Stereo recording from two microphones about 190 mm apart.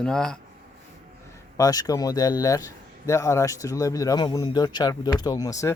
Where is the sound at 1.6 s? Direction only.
20° left (ahead or behind).